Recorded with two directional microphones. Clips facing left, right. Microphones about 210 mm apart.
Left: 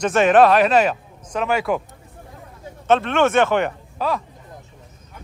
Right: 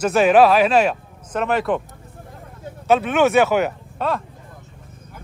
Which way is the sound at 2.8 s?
5° right (ahead or behind).